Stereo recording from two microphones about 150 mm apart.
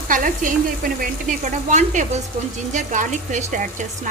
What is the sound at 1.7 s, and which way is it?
Speech, 55° right (ahead or behind).